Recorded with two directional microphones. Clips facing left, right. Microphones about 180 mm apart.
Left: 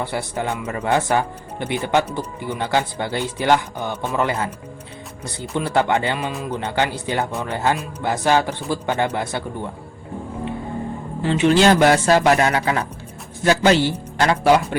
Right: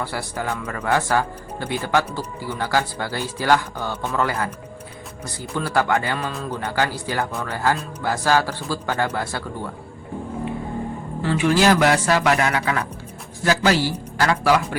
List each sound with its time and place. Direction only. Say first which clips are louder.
0.0 s speech: left 3 dB; 20° left (ahead or behind)
11.2 s speech: left 3 dB; 25° left (ahead or behind)